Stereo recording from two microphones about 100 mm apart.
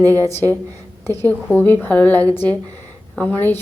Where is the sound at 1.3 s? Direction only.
20° left (ahead or behind).